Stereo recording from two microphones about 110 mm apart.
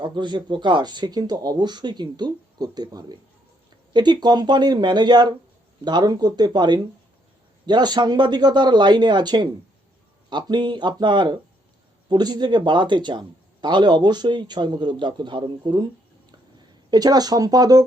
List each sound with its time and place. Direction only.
0.0 s a man's voice: 45° right (ahead or behind)
16.9 s speech: 35° right (ahead or behind)